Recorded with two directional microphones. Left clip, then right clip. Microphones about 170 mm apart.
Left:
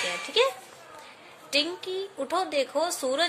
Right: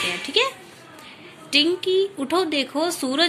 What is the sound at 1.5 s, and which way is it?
A woman's voice, 15° left (ahead or behind).